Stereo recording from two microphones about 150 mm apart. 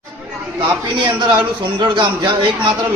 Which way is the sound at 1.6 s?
30° right (ahead or behind).